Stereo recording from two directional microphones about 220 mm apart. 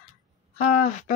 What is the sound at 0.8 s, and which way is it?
Female singing, 35° left (ahead or behind).